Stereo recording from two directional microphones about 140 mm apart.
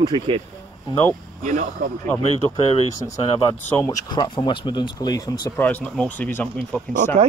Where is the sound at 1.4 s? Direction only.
70° right (ahead or behind).